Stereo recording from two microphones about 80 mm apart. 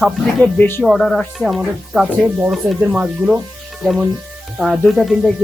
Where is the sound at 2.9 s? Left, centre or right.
Centre.